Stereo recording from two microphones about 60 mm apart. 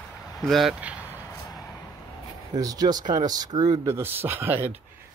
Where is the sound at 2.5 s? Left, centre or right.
Right.